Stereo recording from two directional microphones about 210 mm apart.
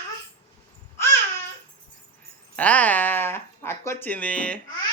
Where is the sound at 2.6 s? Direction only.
5° left (ahead or behind).